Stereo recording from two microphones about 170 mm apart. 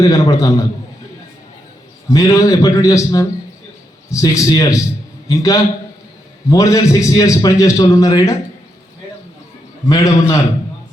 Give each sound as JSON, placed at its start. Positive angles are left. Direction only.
{"t": 0.0, "sound": "a man's voice", "side_deg": 20}
{"t": 2.0, "sound": "a man's voice", "side_deg": 20}
{"t": 9.9, "sound": "a man's voice", "side_deg": 20}